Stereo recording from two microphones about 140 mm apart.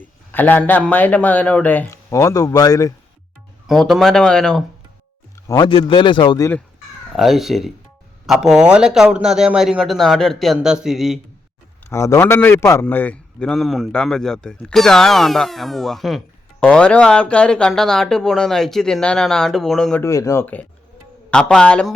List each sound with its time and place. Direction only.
0.3 s a man's voice: 15° left (ahead or behind)
2.0 s a man's voice: 25° left (ahead or behind)
3.7 s speech: centre (ahead or behind)
5.5 s a man's voice: 35° left (ahead or behind)
7.1 s speech: centre (ahead or behind)
11.9 s a man's voice: 20° left (ahead or behind); by 20.0 s 5° left (ahead or behind)
20.0 s a man's voice: 20° left (ahead or behind); by 21.9 s 5° left (ahead or behind)